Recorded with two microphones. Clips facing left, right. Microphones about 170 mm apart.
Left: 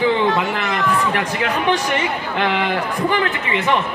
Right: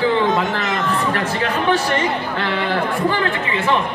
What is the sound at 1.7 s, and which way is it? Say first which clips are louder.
Speech: right 1 dB; 15° left (ahead or behind).